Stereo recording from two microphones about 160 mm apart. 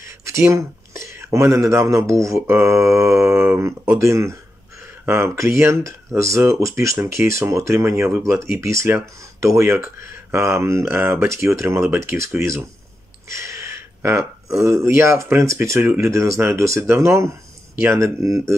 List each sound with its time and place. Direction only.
0.3 s speech: 20° right (ahead or behind)
13.3 s speech: 15° right (ahead or behind)